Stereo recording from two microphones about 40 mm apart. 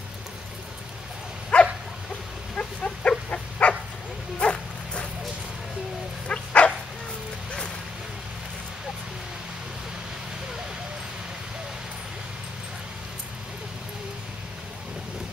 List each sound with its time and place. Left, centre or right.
1.5 s dog: left
6.2 s dog: left